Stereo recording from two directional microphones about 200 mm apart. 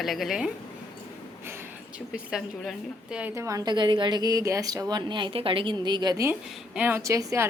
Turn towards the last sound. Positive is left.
turn(degrees=-15)  # may be behind; listen again after turning